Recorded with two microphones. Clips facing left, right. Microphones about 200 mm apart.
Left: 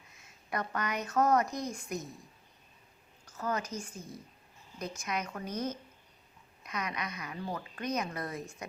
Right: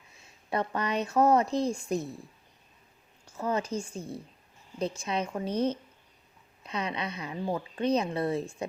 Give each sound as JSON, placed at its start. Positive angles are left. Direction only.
{"t": 0.5, "sound": "speech", "side_deg": -30}
{"t": 3.2, "sound": "speech", "side_deg": -30}